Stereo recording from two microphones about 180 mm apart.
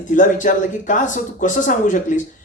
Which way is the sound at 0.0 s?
45° left (ahead or behind).